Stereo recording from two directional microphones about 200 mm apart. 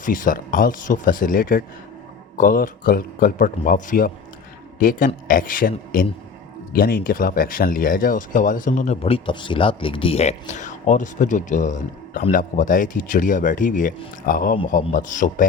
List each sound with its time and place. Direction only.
0.0 s speech: 40° left (ahead or behind)